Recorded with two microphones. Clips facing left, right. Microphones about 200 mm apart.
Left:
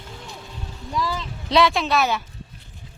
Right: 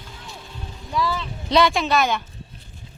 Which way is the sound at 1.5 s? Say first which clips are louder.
Even; centre (ahead or behind).